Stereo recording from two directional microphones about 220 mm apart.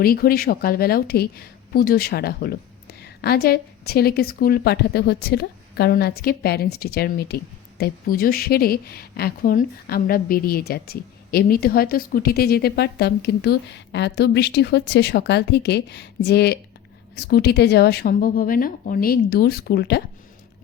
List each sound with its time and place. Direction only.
0.0 s a woman's voice: 40° left (ahead or behind)